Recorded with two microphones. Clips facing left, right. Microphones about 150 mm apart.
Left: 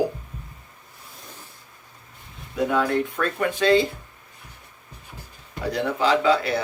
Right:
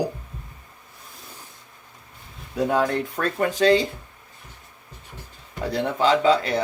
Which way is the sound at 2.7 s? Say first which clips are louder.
Even; 40° right (ahead or behind).